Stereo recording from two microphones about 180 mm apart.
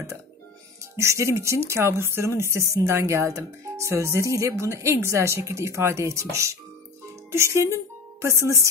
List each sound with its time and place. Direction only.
0.9 s speech: 15° right (ahead or behind)